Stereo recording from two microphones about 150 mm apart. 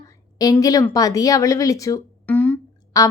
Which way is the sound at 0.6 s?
25° left (ahead or behind).